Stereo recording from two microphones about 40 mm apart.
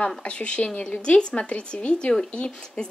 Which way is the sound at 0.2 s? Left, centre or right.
Left.